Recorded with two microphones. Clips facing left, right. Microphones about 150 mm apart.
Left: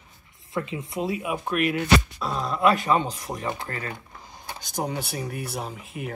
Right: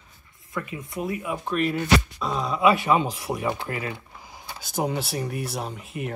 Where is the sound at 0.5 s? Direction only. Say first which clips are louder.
Left 3 dB; 25° left (ahead or behind).